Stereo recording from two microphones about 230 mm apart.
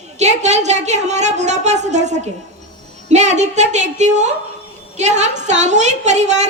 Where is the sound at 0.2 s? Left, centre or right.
Right.